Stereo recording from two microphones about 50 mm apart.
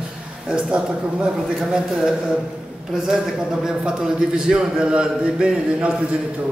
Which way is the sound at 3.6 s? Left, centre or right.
Centre.